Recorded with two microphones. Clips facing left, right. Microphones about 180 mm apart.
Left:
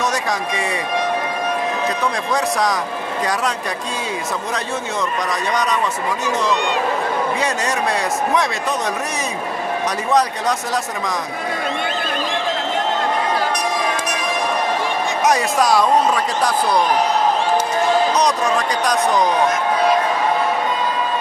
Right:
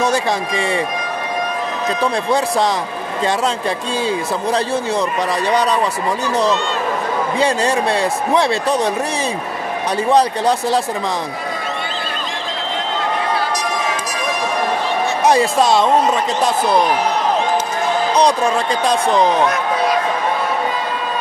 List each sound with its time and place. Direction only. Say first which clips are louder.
0.0 s speech: right 4 dB; 30° right (ahead or behind)
2.3 s speech: right 2 dB; 30° right (ahead or behind)
5.3 s speech: right 5 dB; 30° right (ahead or behind)
7.3 s speech: right 5 dB; 30° right (ahead or behind)
10.0 s speech: right 4 dB; 30° right (ahead or behind)
15.2 s speech: right 3 dB; 30° right (ahead or behind)
18.1 s speech: right 3 dB; 30° right (ahead or behind)